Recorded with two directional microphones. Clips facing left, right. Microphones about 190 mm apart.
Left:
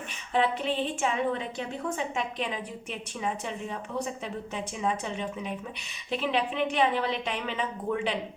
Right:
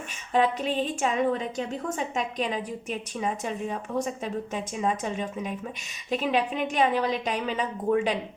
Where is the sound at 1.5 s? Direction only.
45° right (ahead or behind).